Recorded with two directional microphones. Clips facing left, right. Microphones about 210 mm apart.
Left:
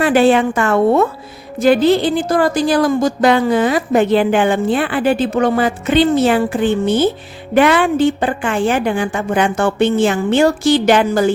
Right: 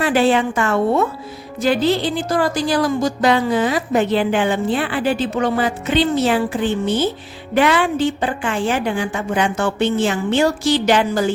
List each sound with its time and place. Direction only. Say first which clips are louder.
0.0 s a woman's voice: left 4 dB; 55° left (ahead or behind)